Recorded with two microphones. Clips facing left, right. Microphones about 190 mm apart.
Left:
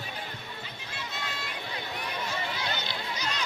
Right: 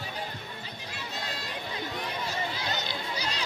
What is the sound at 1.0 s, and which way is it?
Run, 35° right (ahead or behind).